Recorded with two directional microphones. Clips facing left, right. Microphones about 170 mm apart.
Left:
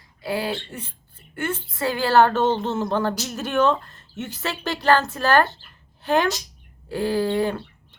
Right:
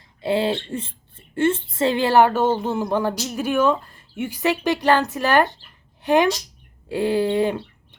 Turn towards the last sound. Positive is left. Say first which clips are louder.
# right 2 dB
turn(degrees=-20)  # may be behind; listen again after turning